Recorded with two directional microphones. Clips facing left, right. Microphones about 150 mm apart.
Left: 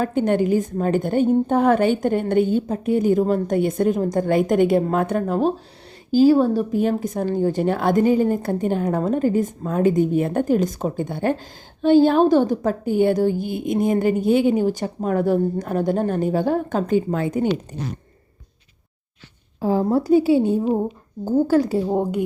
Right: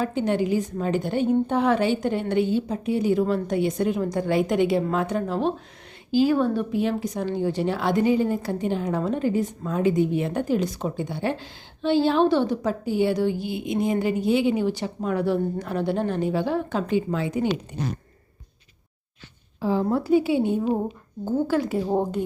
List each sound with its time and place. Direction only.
0.0 s a woman's voice: 50° left (ahead or behind)
19.6 s a woman's voice: 40° left (ahead or behind)
21.8 s speech: 10° left (ahead or behind)